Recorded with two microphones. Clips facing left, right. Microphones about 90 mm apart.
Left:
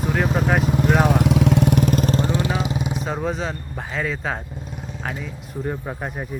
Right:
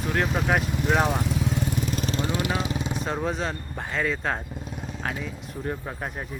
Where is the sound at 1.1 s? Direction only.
75° left (ahead or behind); by 2.9 s 20° left (ahead or behind).